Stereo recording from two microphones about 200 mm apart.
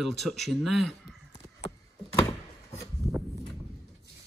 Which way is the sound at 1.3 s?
30° left (ahead or behind).